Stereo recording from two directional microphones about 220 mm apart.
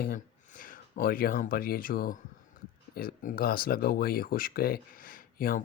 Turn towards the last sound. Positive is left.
turn(degrees=40)  # may be behind; listen again after turning